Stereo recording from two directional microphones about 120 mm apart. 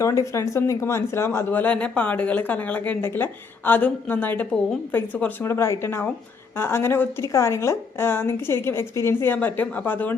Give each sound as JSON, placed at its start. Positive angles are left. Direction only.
{"t": 0.0, "sound": "a woman's voice", "side_deg": 25}